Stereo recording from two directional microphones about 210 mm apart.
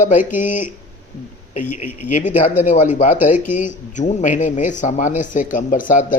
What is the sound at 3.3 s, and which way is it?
Speech, 10° right (ahead or behind).